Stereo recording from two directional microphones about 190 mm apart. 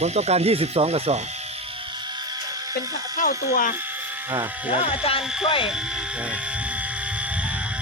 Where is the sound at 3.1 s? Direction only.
45° left (ahead or behind).